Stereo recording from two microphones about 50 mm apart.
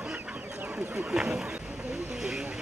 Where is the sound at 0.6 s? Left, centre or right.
Right.